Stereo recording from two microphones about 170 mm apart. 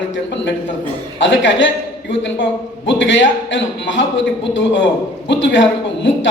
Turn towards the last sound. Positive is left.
turn(degrees=90)